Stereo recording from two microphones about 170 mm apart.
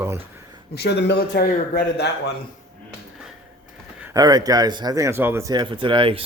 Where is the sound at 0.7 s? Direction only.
80° left.